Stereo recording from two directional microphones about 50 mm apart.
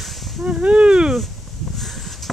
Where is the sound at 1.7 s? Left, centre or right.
Centre.